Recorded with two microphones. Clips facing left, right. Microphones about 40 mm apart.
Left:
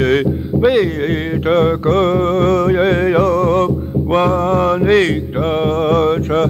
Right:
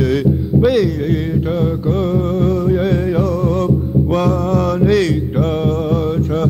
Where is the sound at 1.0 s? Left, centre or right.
Left.